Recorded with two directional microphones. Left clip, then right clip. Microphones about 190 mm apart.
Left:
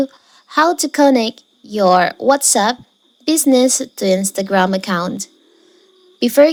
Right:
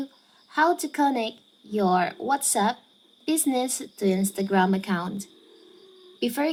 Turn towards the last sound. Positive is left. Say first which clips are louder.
# left 16 dB
turn(degrees=50)  # may be behind; listen again after turning